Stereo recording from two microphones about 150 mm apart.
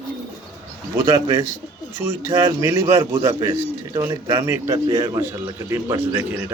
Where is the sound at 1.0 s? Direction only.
25° right (ahead or behind).